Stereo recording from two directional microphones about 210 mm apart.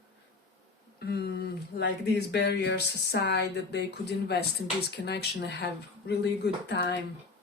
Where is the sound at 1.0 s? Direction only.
50° left (ahead or behind).